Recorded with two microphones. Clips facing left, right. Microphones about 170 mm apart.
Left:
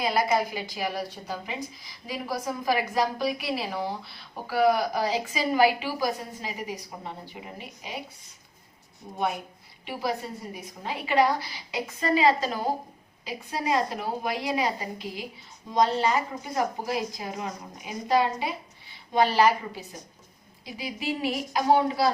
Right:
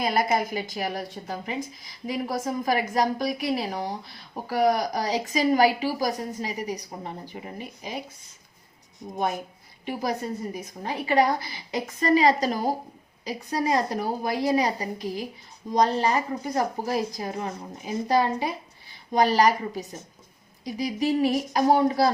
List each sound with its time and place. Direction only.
0.0 s a woman's voice: 50° right (ahead or behind)
9.1 s a woman's voice: 40° right (ahead or behind)
17.3 s speech: 30° right (ahead or behind)
18.1 s a woman's voice: 40° right (ahead or behind)